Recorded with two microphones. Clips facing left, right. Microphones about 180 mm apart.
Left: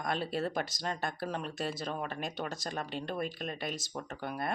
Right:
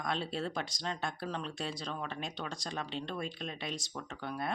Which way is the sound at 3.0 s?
50° left (ahead or behind).